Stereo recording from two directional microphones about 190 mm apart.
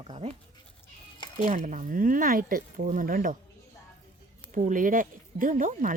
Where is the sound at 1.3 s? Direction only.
40° right (ahead or behind).